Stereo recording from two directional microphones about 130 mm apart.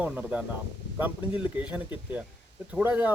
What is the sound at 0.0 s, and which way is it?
Speech, 10° right (ahead or behind).